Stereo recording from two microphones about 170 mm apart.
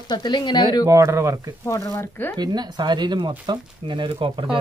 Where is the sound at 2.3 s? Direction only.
25° right (ahead or behind).